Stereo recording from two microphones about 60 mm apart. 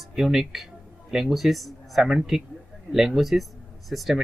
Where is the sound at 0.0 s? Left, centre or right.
Centre.